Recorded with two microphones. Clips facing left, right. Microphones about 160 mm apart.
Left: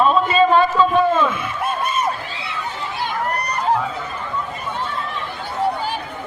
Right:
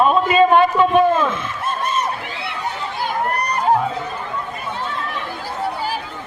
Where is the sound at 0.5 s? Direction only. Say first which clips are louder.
Right 2 dB; 15° right (ahead or behind).